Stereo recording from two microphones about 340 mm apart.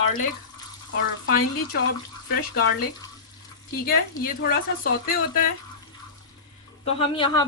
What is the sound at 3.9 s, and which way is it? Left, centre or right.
A woman's voice, left.